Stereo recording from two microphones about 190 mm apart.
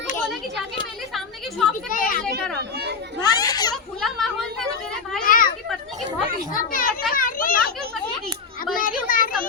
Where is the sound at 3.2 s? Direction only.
20° left (ahead or behind).